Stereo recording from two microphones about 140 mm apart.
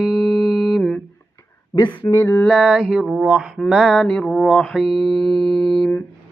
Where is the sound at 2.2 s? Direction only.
15° left (ahead or behind).